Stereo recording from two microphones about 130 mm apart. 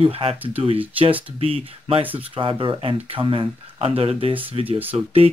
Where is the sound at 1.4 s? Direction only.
45° right (ahead or behind).